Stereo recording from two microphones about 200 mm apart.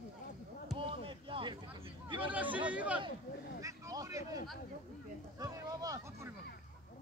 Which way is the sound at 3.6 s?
15° right (ahead or behind).